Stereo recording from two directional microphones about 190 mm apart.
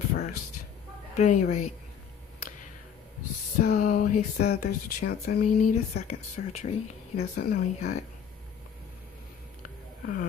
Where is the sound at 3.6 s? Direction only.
45° left (ahead or behind).